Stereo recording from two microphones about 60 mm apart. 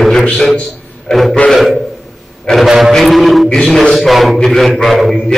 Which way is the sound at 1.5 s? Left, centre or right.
Centre.